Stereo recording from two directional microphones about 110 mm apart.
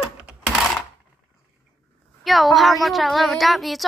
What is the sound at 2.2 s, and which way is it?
Speech, centre (ahead or behind).